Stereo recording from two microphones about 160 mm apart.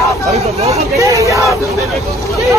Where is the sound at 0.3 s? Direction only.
40° right (ahead or behind).